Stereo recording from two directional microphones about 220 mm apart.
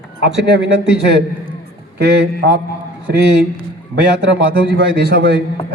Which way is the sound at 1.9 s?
50° right (ahead or behind).